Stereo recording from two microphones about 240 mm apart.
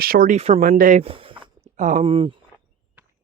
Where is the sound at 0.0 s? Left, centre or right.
Right.